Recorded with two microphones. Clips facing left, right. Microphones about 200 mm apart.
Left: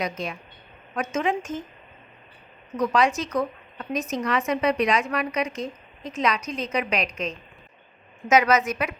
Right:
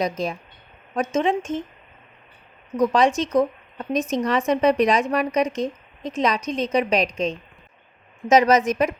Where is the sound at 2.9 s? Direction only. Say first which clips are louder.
Right 2 dB; 30° right (ahead or behind).